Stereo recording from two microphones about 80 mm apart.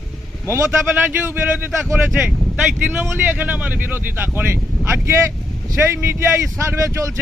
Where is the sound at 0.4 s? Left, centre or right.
Right.